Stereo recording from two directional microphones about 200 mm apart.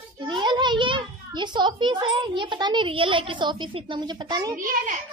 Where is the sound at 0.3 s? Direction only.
25° right (ahead or behind).